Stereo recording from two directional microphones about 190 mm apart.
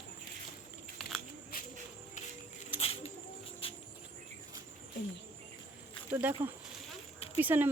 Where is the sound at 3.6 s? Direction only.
30° left (ahead or behind).